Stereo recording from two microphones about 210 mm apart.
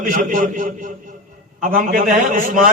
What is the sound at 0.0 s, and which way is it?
Speech, 40° right (ahead or behind).